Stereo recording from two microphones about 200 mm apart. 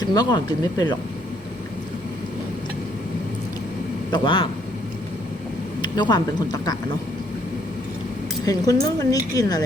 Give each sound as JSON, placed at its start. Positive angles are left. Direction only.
{"t": 0.0, "sound": "speech", "side_deg": 20}
{"t": 4.1, "sound": "speech", "side_deg": 25}
{"t": 5.8, "sound": "speech", "side_deg": 20}
{"t": 8.4, "sound": "speech", "side_deg": 20}